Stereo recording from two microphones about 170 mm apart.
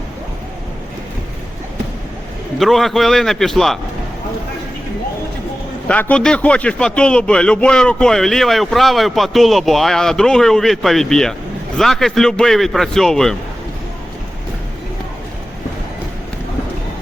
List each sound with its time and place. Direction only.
2.6 s a man's voice: centre (ahead or behind)
5.9 s a man's voice: 10° left (ahead or behind)